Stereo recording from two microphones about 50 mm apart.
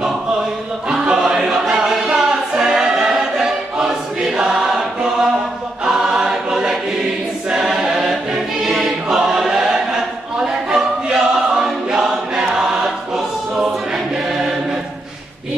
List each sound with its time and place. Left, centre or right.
0.8 s choir: centre